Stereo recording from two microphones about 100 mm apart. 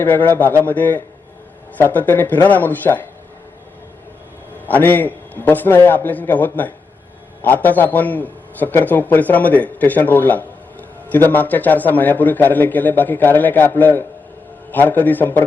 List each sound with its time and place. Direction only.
0.0 s speech: 20° left (ahead or behind)
4.6 s a man's voice: 20° left (ahead or behind)